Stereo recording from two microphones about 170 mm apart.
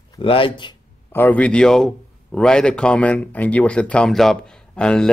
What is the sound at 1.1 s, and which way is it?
A man's voice, 10° left (ahead or behind).